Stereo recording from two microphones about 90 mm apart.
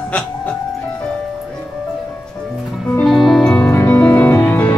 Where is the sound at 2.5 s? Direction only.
Centre (ahead or behind).